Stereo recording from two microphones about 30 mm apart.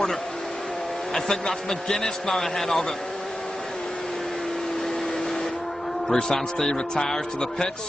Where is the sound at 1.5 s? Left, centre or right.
Centre.